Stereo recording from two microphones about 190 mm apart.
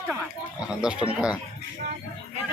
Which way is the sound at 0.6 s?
5° right (ahead or behind).